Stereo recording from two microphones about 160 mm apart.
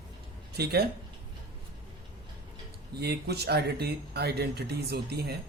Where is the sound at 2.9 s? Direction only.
90° right.